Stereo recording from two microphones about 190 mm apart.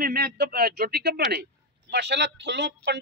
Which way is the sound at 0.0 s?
55° right (ahead or behind).